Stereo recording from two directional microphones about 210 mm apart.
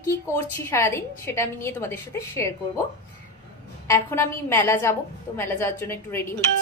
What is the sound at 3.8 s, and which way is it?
A woman's voice, 15° left (ahead or behind).